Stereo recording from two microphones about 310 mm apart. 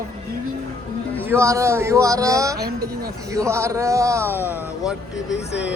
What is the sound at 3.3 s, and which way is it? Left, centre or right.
Speech, centre.